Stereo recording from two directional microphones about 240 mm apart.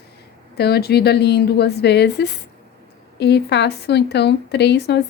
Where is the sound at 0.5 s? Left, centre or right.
Left.